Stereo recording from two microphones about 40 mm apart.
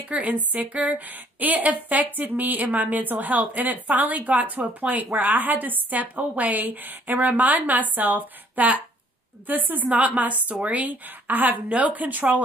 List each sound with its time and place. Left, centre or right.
0.1 s a woman's voice: right
11.1 s a woman's voice: right